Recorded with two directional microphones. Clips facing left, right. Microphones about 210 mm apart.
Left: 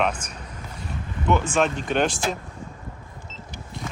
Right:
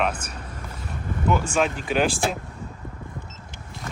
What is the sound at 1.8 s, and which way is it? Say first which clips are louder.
Speech: even; 5° right (ahead or behind).